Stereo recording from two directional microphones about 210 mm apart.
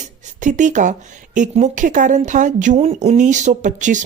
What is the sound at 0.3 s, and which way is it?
A woman's voice, 35° right (ahead or behind).